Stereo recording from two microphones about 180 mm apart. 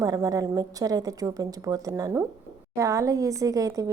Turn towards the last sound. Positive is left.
turn(degrees=-20)  # may be behind; listen again after turning